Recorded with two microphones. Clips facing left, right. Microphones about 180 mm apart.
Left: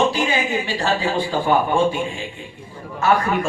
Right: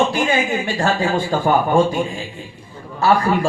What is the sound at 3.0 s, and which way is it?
Speech, 35° right (ahead or behind).